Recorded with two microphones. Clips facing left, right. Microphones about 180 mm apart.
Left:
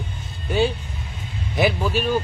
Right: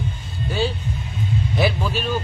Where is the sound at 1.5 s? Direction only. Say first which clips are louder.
Left 3 dB; 15° left (ahead or behind).